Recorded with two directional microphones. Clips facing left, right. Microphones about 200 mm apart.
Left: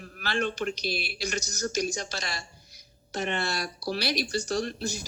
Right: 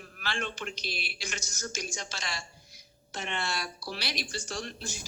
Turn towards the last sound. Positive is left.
turn(degrees=40)  # may be behind; listen again after turning